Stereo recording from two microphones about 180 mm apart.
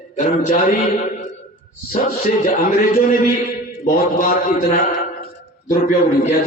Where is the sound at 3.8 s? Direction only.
50° left (ahead or behind).